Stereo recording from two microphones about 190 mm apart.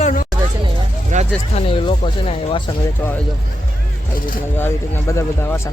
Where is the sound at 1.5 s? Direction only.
30° left (ahead or behind).